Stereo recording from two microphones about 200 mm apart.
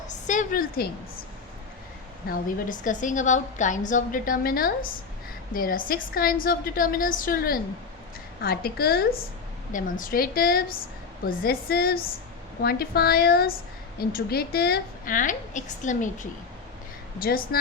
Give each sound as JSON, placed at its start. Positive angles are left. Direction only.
{"t": 0.1, "sound": "a woman's voice", "side_deg": 40}
{"t": 2.3, "sound": "a woman's voice", "side_deg": 40}